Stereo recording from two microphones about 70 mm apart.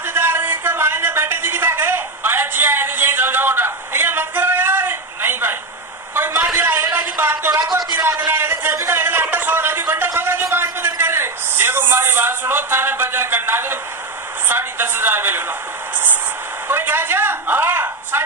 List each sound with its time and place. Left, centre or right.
0.0 s a sound: right
14.5 s a woman's voice: right
16.6 s speech: right